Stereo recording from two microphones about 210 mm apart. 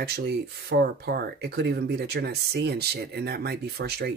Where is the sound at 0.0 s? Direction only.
50° right (ahead or behind).